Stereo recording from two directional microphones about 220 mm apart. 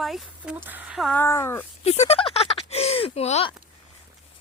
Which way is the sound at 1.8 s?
30° left (ahead or behind).